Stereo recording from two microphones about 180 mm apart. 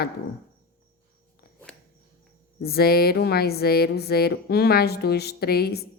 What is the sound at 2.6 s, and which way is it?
A woman's voice, 60° left (ahead or behind).